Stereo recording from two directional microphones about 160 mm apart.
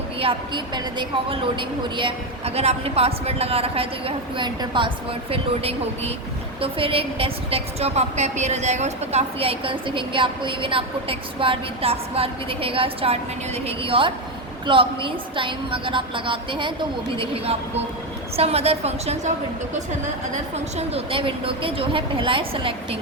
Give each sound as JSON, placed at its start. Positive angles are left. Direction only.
{"t": 0.2, "sound": "a woman's voice", "side_deg": -30}
{"t": 20.3, "sound": "a woman's voice", "side_deg": -40}